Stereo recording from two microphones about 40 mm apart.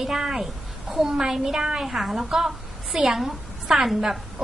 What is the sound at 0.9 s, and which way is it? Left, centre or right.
A woman's voice, centre.